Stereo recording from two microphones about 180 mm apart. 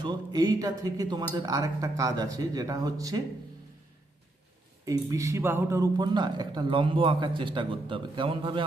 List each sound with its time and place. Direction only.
0.0 s a man's voice: 25° right (ahead or behind)
4.9 s a man's voice: 20° right (ahead or behind)